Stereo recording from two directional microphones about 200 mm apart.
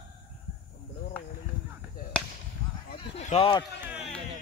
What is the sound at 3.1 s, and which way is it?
Speech, 30° left (ahead or behind).